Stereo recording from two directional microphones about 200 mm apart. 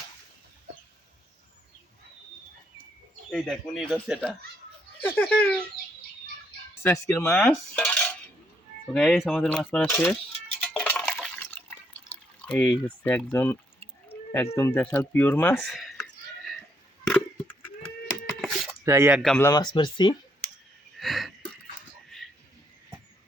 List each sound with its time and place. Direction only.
3.2 s speech: 5° left (ahead or behind)
6.8 s speech: 15° left (ahead or behind)
7.3 s dishes: 5° left (ahead or behind)
8.9 s speech: centre (ahead or behind)
10.6 s water: 5° left (ahead or behind)
14.3 s speech: 15° left (ahead or behind)
17.0 s a sound: 5° left (ahead or behind)
18.9 s speech: 10° right (ahead or behind)
19.2 s speech: 5° left (ahead or behind)
19.5 s speech: 20° left (ahead or behind)
21.0 s a sound: centre (ahead or behind)